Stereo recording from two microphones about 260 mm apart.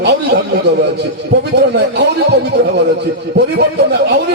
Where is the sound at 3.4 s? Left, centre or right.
Right.